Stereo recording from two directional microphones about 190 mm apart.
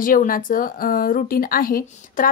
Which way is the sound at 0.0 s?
45° left (ahead or behind).